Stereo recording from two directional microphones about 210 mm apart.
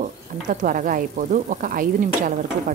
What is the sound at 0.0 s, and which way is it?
Speech, 40° right (ahead or behind).